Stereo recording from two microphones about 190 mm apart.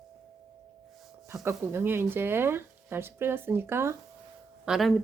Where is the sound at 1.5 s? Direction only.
10° right (ahead or behind).